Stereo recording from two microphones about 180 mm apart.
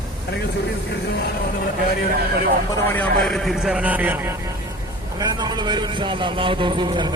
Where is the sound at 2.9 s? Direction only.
5° left (ahead or behind); by 4.4 s 10° right (ahead or behind).